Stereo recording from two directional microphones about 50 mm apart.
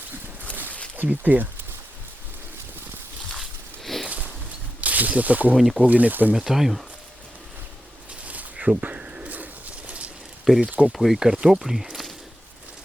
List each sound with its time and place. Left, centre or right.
1.2 s speech: right
4.0 s a sound: right
4.8 s speech: right
5.5 s speech: centre
5.8 s speech: right
6.3 s speech: centre
8.7 s pigeon: right
10.5 s speech: centre
11.2 s speech: centre
11.6 s a sound: centre